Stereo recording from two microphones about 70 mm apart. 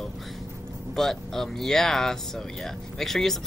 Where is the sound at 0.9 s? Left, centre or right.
Centre.